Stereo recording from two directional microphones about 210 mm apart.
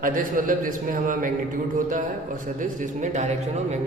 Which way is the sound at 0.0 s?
40° right (ahead or behind).